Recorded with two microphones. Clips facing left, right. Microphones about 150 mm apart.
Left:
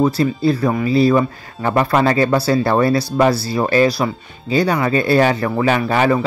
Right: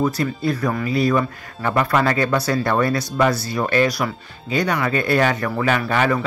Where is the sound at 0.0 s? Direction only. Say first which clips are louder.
Left 5 dB; 30° left (ahead or behind).